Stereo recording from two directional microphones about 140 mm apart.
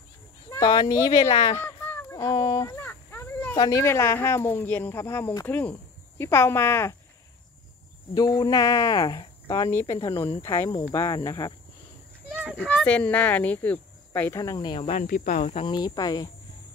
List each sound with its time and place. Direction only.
0.5 s speech: 30° left (ahead or behind)
1.3 s speech: 40° left (ahead or behind)
1.6 s a sound: 15° left (ahead or behind)
3.5 s speech: 30° left (ahead or behind)
3.8 s speech: 20° left (ahead or behind)
8.1 s speech: 25° left (ahead or behind)
12.5 s speech: 5° left (ahead or behind)
14.4 s speech: 30° left (ahead or behind)
15.0 s speech: 70° left (ahead or behind)
15.6 s speech: 30° left (ahead or behind)